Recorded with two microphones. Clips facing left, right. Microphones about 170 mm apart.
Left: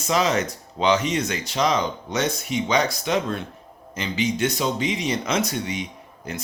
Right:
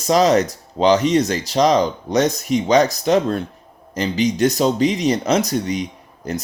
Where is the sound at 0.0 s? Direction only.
40° right (ahead or behind).